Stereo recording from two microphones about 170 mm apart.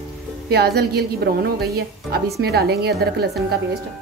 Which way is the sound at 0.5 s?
70° right (ahead or behind).